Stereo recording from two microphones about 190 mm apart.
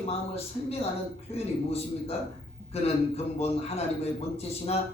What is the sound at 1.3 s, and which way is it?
Speech, 35° left (ahead or behind).